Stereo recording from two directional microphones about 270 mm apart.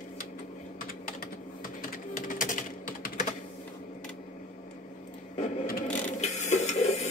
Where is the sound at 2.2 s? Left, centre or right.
Left.